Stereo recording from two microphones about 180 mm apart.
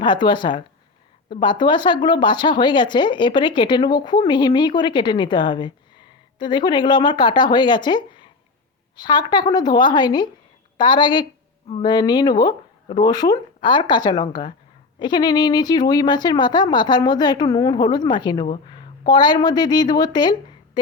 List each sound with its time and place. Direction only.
0.0 s speech: 25° left (ahead or behind)